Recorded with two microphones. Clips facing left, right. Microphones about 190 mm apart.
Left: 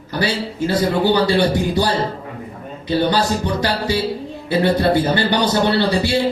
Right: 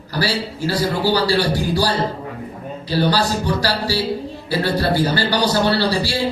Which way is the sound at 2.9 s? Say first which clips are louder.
Left 1 dB; 20° left (ahead or behind).